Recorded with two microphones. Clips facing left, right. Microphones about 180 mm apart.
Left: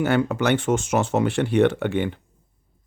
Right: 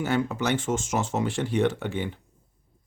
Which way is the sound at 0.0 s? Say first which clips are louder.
Left 5 dB; 65° left (ahead or behind).